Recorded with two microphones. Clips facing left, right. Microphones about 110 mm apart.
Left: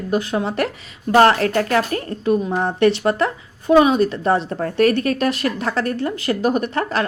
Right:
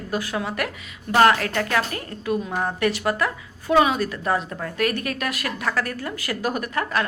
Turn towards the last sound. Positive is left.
turn(degrees=30)  # may be behind; listen again after turning